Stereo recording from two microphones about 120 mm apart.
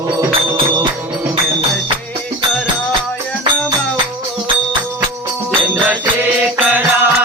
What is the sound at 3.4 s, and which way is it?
Music, 40° right (ahead or behind).